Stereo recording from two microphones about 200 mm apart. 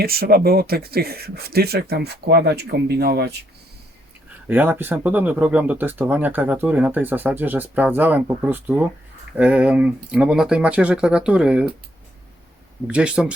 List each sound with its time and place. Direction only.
0.0 s speech: 50° right (ahead or behind)
4.4 s speech: 10° right (ahead or behind)
12.9 s speech: 5° right (ahead or behind)